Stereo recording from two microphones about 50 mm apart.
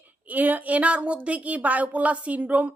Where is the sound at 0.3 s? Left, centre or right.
Right.